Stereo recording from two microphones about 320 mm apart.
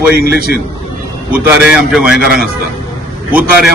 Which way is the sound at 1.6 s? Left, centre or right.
Centre.